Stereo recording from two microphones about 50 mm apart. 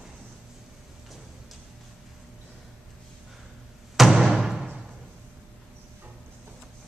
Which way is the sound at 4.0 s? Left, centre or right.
Centre.